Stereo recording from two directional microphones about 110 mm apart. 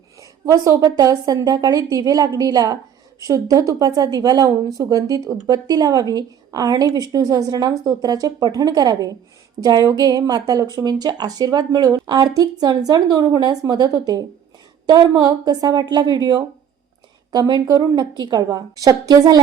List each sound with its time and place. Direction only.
0.2 s speech: 30° right (ahead or behind)